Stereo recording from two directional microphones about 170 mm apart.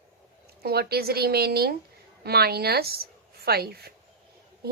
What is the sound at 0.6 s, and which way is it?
A woman's voice, 70° right (ahead or behind).